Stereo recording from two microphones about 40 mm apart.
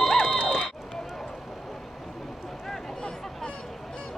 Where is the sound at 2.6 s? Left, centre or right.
Centre.